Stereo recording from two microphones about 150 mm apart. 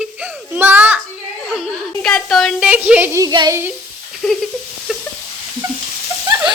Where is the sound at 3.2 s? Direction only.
25° right (ahead or behind).